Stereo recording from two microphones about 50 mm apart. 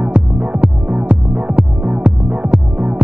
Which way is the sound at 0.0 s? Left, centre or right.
Right.